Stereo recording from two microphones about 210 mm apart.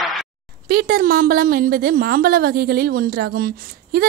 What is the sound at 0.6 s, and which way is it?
A woman's voice, 45° right (ahead or behind).